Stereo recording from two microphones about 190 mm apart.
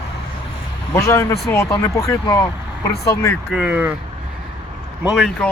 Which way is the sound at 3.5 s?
5° right (ahead or behind).